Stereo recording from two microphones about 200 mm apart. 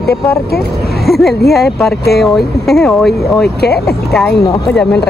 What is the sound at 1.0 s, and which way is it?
Speech, centre (ahead or behind).